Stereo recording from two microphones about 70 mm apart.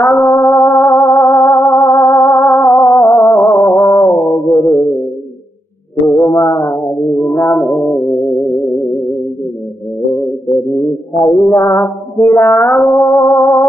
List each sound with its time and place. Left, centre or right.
0.0 s music: left
2.5 s music: left
4.0 s music: left
6.0 s music: left
10.1 s music: left
10.8 s music: left